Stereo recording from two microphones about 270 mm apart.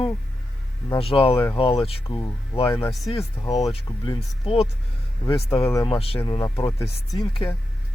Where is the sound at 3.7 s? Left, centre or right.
Left.